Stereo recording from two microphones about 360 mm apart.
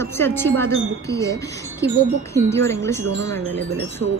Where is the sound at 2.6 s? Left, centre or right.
Centre.